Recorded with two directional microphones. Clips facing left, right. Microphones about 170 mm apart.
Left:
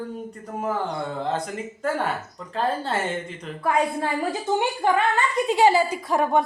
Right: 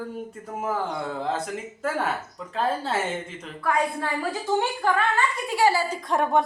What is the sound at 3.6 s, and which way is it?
A woman's voice, 25° left (ahead or behind).